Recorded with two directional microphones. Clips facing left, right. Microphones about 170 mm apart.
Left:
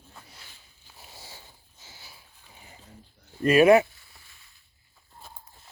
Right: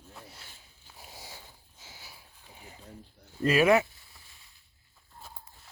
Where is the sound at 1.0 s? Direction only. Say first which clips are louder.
Right 1 dB; 15° right (ahead or behind).